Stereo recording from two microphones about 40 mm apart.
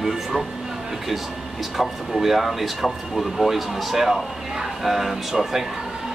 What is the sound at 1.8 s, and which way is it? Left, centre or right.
Speech, centre.